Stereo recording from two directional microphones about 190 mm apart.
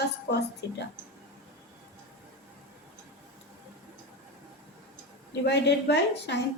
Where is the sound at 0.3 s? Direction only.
60° left (ahead or behind).